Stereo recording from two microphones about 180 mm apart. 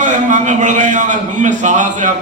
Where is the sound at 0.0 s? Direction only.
45° right (ahead or behind).